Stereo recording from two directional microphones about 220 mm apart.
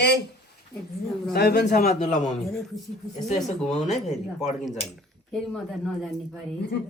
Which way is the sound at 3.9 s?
30° left (ahead or behind).